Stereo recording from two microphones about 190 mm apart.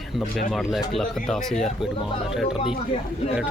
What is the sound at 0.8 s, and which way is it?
Speech, centre (ahead or behind).